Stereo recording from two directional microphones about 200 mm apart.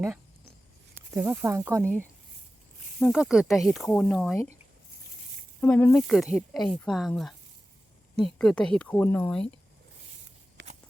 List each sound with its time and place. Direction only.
0.9 s speech: 10° right (ahead or behind)
1.8 s speech: 5° left (ahead or behind)
5.5 s speech: 5° left (ahead or behind)
10.6 s walk: 60° right (ahead or behind)